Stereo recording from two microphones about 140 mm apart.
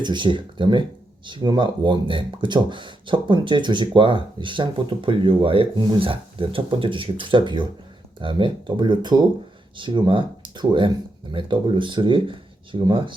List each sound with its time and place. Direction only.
0.0 s speech: 35° right (ahead or behind)